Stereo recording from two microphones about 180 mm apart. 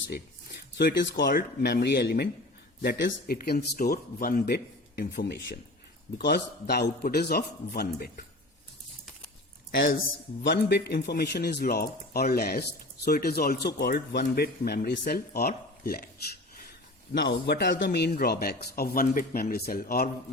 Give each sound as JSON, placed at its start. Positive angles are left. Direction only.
{"t": 0.8, "sound": "speech", "side_deg": 70}
{"t": 10.4, "sound": "speech", "side_deg": 70}
{"t": 17.2, "sound": "speech", "side_deg": 70}